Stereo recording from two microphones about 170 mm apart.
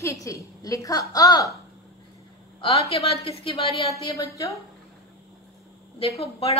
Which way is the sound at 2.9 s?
35° left (ahead or behind).